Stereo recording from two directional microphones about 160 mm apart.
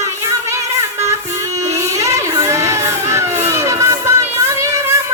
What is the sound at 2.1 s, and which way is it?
Crowd, 20° right (ahead or behind).